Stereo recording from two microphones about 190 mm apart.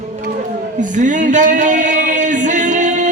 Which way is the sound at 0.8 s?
40° right (ahead or behind).